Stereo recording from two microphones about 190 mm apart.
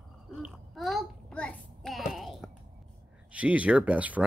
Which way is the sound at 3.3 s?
5° right (ahead or behind).